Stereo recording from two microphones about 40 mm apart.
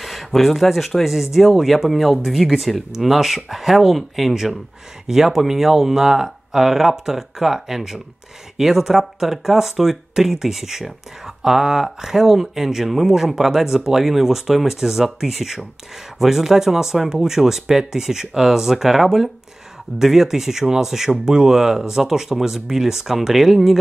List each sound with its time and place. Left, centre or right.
0.0 s speech: centre